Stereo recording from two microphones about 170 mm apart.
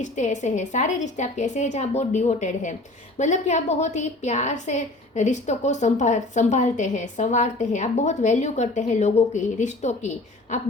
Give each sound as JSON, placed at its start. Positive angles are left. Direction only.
{"t": 0.0, "sound": "a woman's voice", "side_deg": 45}